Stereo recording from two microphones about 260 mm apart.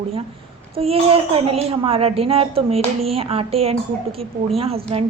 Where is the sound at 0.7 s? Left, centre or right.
Right.